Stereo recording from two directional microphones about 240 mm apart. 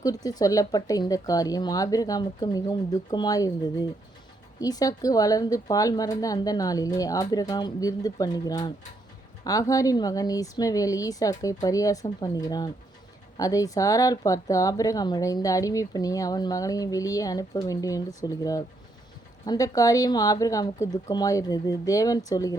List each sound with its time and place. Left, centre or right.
0.0 s speech: centre